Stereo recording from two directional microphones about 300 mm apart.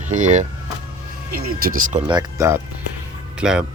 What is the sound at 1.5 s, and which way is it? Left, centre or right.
Speech, right.